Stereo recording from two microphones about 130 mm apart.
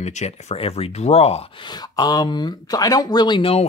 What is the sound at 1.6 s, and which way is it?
Speech, 35° left (ahead or behind).